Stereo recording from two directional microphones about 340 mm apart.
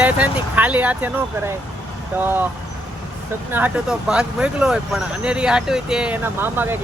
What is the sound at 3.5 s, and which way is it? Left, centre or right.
Speech, centre.